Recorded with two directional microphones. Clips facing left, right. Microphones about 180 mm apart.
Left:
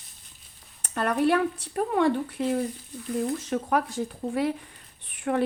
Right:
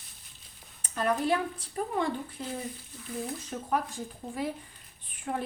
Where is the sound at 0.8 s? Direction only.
65° left (ahead or behind).